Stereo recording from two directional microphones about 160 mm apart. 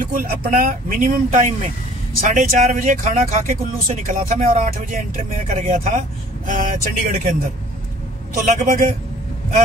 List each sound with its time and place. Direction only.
0.0 s speech: 60° right (ahead or behind)